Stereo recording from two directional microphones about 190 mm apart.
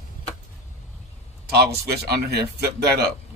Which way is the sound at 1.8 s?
55° right (ahead or behind).